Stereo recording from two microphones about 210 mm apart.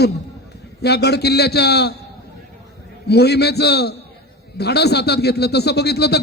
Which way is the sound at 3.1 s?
50° left (ahead or behind).